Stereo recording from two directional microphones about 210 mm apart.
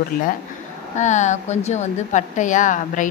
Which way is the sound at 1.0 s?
35° left (ahead or behind).